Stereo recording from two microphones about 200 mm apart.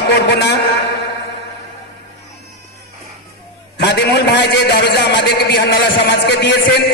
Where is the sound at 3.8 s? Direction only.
60° left (ahead or behind).